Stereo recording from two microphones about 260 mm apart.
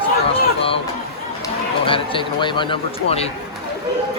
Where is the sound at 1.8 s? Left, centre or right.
Centre.